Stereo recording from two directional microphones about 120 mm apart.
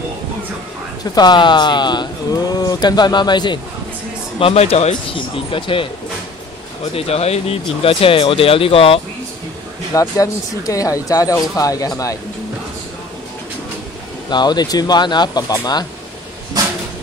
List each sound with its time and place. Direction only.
1.1 s speech: 40° left (ahead or behind)
4.4 s speech: 55° left (ahead or behind)
5.1 s speech: 45° left (ahead or behind)
6.9 s speech: 55° left (ahead or behind)
9.9 s speech: 30° left (ahead or behind)
14.3 s speech: 35° left (ahead or behind)